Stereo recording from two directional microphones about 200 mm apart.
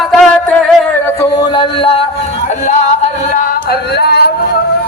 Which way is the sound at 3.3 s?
50° left (ahead or behind).